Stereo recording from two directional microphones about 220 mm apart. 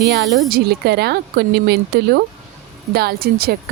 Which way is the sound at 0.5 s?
45° right (ahead or behind).